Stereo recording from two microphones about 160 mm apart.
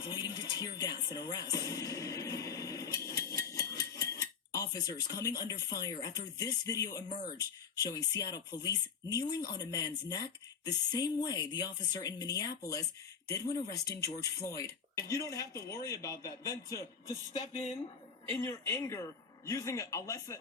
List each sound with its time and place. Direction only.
0.0 s music: 30° left (ahead or behind)
4.5 s speech: 20° left (ahead or behind)
17.4 s speech: 45° left (ahead or behind)
18.3 s speech: 15° left (ahead or behind)